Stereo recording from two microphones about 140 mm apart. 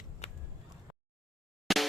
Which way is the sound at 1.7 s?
Centre (ahead or behind).